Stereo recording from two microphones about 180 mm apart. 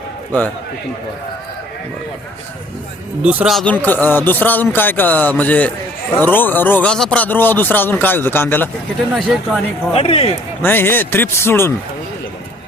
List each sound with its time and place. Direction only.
3.2 s speech: 10° right (ahead or behind); by 8.7 s 10° left (ahead or behind)
9.1 s speech: centre (ahead or behind)
9.9 s speech: 35° left (ahead or behind)
10.6 s speech: 10° left (ahead or behind)